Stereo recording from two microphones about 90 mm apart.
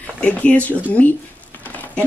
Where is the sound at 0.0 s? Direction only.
15° left (ahead or behind).